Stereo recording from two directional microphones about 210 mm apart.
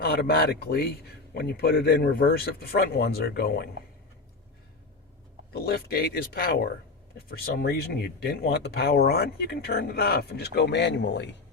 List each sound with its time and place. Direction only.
0.0 s speech: 50° left (ahead or behind)
5.5 s speech: 45° left (ahead or behind)